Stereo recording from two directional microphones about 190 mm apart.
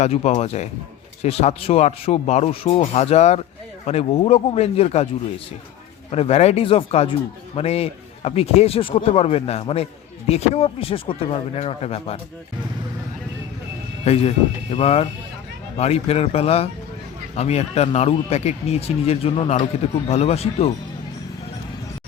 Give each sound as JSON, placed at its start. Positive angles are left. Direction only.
{"t": 0.0, "sound": "a man's voice", "side_deg": 35}
{"t": 6.1, "sound": "a man's voice", "side_deg": 35}
{"t": 14.0, "sound": "a man's voice", "side_deg": 35}